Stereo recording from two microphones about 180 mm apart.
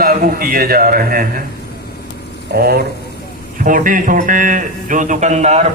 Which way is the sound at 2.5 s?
60° right (ahead or behind).